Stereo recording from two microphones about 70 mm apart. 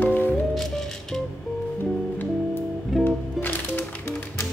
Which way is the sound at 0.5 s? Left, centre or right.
Centre.